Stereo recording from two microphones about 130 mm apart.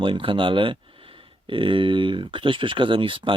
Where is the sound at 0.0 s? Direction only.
40° right (ahead or behind).